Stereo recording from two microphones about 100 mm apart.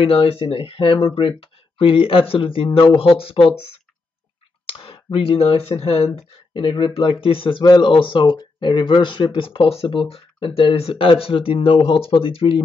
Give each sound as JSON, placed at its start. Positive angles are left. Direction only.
{"t": 0.0, "sound": "speech", "side_deg": 70}
{"t": 6.5, "sound": "speech", "side_deg": 60}